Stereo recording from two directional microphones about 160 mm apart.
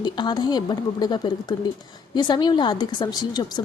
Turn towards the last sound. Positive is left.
turn(degrees=25)  # may be behind; listen again after turning